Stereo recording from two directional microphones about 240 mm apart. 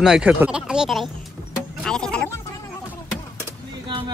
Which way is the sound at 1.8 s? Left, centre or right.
Centre.